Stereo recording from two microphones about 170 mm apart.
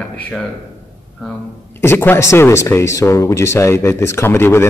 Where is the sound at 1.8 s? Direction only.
15° left (ahead or behind).